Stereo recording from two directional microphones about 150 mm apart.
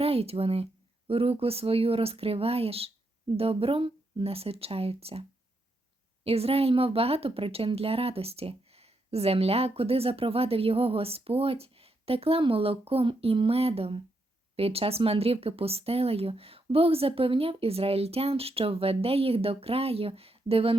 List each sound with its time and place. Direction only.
0.0 s a woman's voice: 40° right (ahead or behind)
6.2 s a woman's voice: 40° right (ahead or behind)